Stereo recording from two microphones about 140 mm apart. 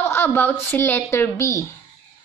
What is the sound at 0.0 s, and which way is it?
A woman's voice, 15° left (ahead or behind).